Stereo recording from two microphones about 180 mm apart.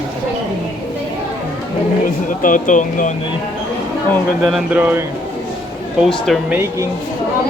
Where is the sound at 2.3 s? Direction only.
45° left (ahead or behind).